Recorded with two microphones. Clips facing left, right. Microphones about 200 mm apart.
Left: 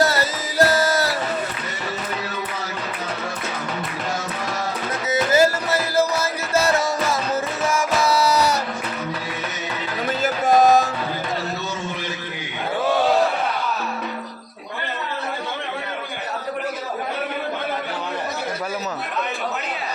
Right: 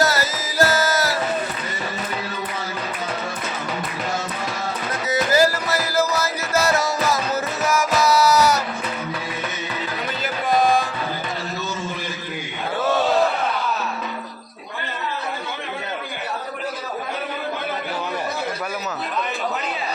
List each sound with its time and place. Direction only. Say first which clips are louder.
0.0 s music: left 1 dB; 30° left (ahead or behind)
5.1 s music: left 1 dB; 25° left (ahead or behind)
10.2 s music: left 4 dB; 45° left (ahead or behind)